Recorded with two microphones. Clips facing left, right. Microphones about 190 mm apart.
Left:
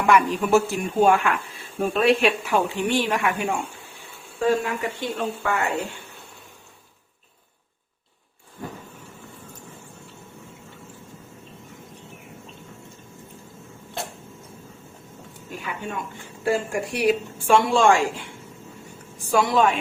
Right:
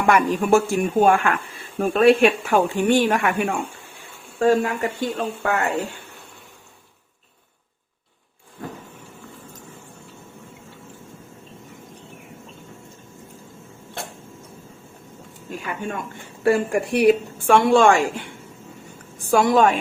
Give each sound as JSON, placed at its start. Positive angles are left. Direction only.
{"t": 0.1, "sound": "speech", "side_deg": -45}
{"t": 16.4, "sound": "a woman's voice", "side_deg": -60}
{"t": 19.3, "sound": "speech", "side_deg": -50}